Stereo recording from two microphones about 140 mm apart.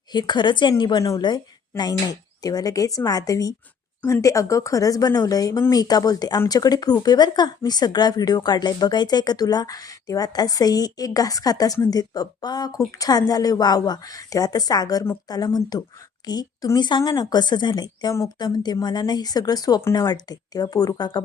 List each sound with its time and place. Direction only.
0.1 s speech: 30° left (ahead or behind)